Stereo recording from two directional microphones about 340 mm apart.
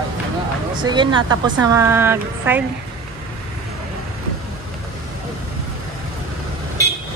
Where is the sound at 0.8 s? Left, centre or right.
Centre.